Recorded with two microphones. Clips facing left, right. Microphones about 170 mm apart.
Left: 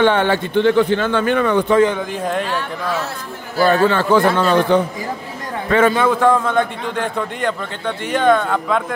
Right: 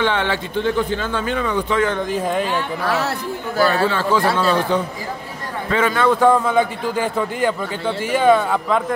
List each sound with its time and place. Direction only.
0.0 s a man's voice: 50° left (ahead or behind)
0.6 s speech: 70° left (ahead or behind)
2.0 s a man's voice: centre (ahead or behind)
2.8 s speech: 65° right (ahead or behind)
3.6 s a man's voice: 60° left (ahead or behind)
5.7 s a man's voice: 50° left (ahead or behind)
6.0 s a man's voice: centre (ahead or behind)